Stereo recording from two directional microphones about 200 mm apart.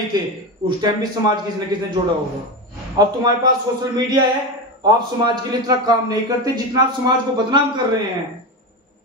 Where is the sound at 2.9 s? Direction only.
20° right (ahead or behind).